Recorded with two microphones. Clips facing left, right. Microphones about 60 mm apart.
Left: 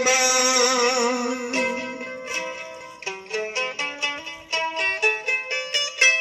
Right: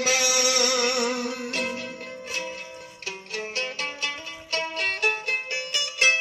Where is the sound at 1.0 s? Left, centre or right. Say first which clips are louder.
Left 4 dB; centre.